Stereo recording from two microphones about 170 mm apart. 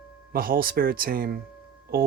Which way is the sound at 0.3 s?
60° right (ahead or behind).